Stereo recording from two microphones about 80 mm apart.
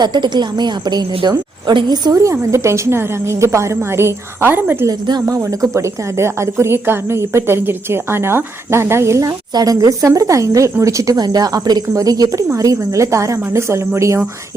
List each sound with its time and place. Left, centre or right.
0.0 s a woman's voice: right
2.1 s a woman's voice: right
4.9 s a woman's voice: right
5.2 s a woman's voice: right
9.5 s a woman's voice: right